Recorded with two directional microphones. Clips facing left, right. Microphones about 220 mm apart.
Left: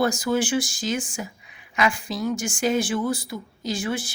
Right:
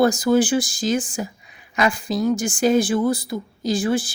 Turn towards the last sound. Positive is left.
turn(degrees=-35)  # may be behind; listen again after turning